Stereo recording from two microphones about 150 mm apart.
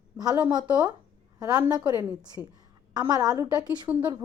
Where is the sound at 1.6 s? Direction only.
10° right (ahead or behind).